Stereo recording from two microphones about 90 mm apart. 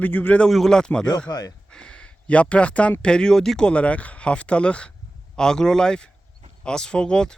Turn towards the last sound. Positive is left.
turn(degrees=10)  # may be behind; listen again after turning